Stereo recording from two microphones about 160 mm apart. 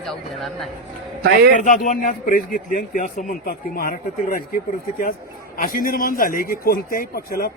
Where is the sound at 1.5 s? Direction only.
55° left (ahead or behind).